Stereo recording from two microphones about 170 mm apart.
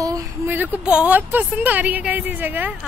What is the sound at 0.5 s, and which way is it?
A woman's voice, 10° right (ahead or behind).